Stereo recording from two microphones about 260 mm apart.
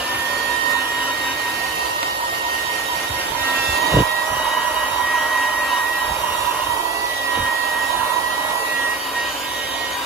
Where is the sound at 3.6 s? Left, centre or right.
Right.